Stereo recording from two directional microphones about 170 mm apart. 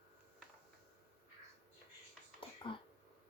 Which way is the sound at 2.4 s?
30° left (ahead or behind).